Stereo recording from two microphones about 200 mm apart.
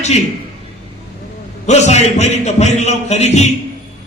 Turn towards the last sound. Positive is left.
turn(degrees=35)  # may be behind; listen again after turning